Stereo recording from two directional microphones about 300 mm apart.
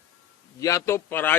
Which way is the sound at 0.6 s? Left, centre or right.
Centre.